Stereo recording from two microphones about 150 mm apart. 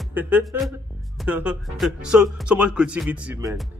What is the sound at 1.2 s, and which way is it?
Speech, 10° right (ahead or behind).